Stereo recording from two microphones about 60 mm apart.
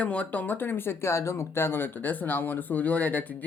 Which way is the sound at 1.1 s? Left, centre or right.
Left.